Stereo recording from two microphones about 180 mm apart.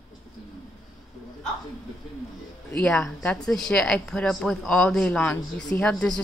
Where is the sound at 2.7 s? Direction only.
5° left (ahead or behind).